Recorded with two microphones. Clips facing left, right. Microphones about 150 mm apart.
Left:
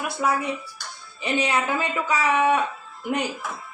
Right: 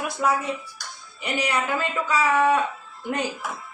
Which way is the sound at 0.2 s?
5° left (ahead or behind).